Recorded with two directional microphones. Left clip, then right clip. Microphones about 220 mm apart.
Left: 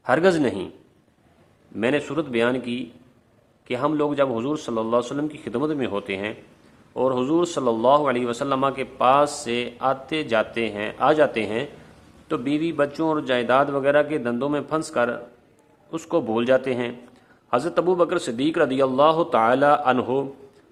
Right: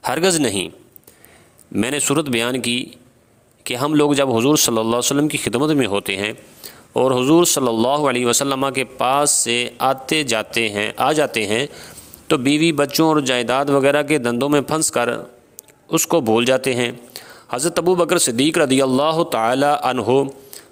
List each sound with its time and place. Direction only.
0.0 s a man's voice: 45° right (ahead or behind)
1.7 s a man's voice: 50° right (ahead or behind)